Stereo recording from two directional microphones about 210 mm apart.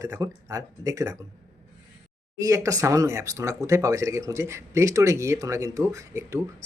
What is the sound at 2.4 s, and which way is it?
Speech, 15° right (ahead or behind).